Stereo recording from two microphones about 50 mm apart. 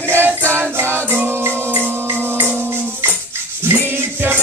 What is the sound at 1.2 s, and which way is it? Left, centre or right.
Music, right.